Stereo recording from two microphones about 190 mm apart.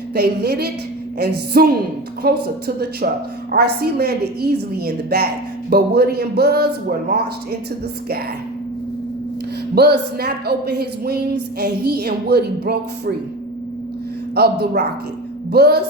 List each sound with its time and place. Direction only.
0.1 s a woman's voice: 60° right (ahead or behind)
9.7 s a woman's voice: 60° right (ahead or behind)
14.3 s a woman's voice: 55° right (ahead or behind)